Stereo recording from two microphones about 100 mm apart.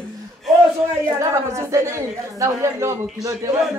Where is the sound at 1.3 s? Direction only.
30° right (ahead or behind).